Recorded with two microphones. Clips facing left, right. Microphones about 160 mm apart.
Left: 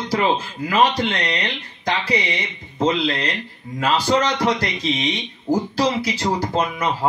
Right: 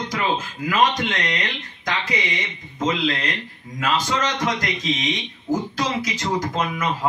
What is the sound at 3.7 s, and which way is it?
A man's voice, 35° left (ahead or behind).